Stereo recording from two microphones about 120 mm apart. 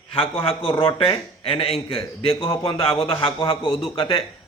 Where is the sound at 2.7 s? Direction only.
45° left (ahead or behind).